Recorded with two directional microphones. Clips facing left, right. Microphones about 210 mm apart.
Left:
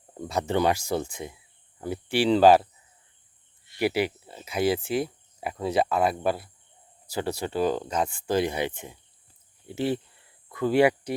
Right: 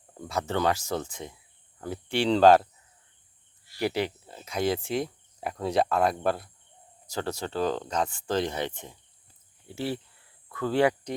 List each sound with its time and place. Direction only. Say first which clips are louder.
0.1 s speech: left 3 dB; 20° left (ahead or behind)
3.8 s speech: left 3 dB; 10° left (ahead or behind)